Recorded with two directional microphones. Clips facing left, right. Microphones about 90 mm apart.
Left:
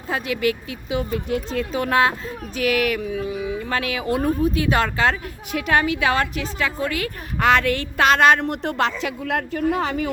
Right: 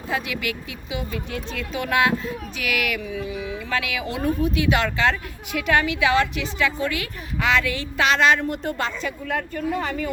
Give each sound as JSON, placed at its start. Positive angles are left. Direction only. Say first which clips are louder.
{"t": 0.1, "sound": "speech", "louder": "left 5 dB", "side_deg": 40}